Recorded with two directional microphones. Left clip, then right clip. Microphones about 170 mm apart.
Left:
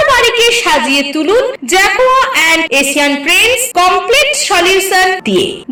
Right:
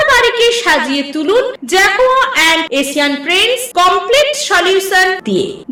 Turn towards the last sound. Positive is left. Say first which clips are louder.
# left 2 dB
turn(degrees=15)  # may be behind; listen again after turning